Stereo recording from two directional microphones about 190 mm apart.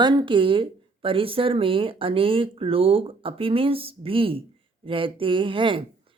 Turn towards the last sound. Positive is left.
turn(degrees=-25)  # may be behind; listen again after turning